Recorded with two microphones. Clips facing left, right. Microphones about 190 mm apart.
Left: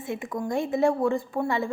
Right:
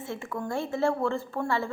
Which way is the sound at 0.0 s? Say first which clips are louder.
Left 3 dB; 15° left (ahead or behind).